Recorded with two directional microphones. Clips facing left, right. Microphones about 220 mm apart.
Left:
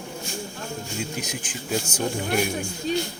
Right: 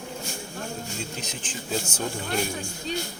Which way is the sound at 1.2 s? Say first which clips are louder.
Left 3 dB; 10° left (ahead or behind).